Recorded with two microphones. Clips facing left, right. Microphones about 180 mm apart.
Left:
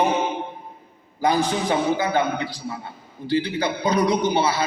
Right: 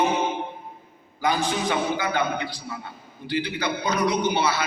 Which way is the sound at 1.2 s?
25° left (ahead or behind).